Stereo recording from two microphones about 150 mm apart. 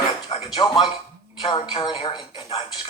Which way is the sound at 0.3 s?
30° left (ahead or behind).